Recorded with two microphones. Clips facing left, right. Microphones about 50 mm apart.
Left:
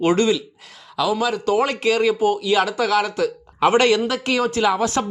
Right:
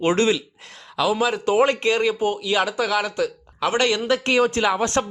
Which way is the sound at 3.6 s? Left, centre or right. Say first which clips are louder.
Left 5 dB; left.